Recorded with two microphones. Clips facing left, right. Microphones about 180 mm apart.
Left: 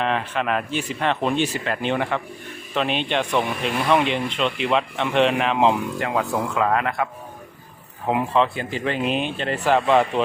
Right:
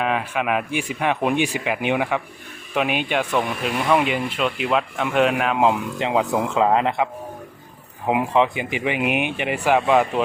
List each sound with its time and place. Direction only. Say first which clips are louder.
0.0 s speech: right 1 dB; 5° right (ahead or behind)
6.0 s speech: right 3 dB; 20° right (ahead or behind)